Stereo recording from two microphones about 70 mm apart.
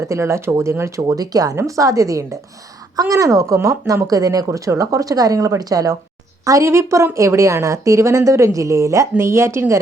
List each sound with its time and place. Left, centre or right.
0.1 s a woman's voice: right
1.0 s speech: right
1.5 s a woman's voice: right
6.7 s a woman's voice: right